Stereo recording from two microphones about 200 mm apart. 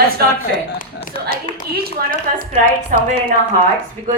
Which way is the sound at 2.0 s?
50° right (ahead or behind).